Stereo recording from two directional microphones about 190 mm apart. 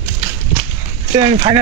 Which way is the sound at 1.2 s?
25° right (ahead or behind).